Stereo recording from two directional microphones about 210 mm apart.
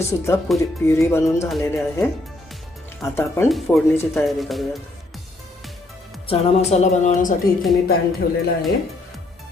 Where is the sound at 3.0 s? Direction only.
10° left (ahead or behind).